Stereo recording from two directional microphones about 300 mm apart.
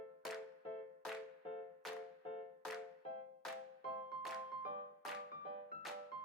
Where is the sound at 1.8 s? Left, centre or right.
Centre.